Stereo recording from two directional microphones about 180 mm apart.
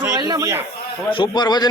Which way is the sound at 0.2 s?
20° right (ahead or behind).